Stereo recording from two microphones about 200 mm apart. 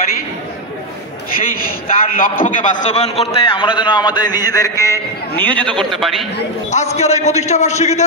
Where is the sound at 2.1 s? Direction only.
45° left (ahead or behind); by 6.2 s centre (ahead or behind).